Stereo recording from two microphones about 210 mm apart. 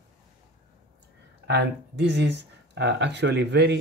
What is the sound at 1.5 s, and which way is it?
Speech, 55° right (ahead or behind).